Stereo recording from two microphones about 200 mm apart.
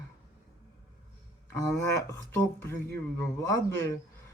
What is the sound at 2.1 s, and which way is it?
Speech, 10° left (ahead or behind).